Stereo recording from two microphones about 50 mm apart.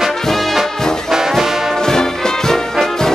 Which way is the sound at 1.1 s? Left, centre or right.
Centre.